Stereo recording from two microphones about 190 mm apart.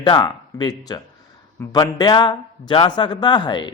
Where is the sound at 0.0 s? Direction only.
20° left (ahead or behind).